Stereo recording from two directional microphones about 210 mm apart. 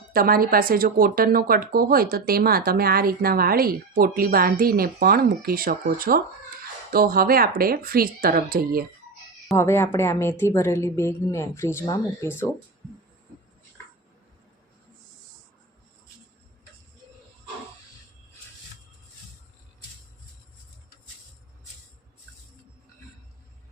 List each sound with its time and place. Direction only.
0.1 s a woman's voice: 45° right (ahead or behind)
9.6 s a woman's voice: 10° left (ahead or behind)